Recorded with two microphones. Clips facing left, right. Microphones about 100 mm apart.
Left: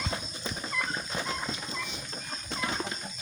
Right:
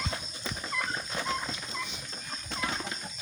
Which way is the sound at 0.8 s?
10° left (ahead or behind).